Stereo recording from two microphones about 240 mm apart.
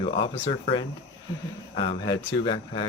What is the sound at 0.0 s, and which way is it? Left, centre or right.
Speech, left.